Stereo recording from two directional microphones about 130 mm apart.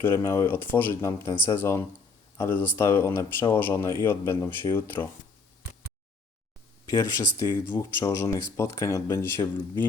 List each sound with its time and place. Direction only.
0.0 s speech: 20° left (ahead or behind)
6.8 s speech: 25° left (ahead or behind)